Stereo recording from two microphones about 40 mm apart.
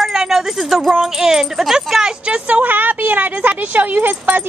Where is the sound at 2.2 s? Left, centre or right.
Right.